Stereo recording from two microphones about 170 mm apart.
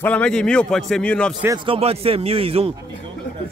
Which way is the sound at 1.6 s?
35° right (ahead or behind).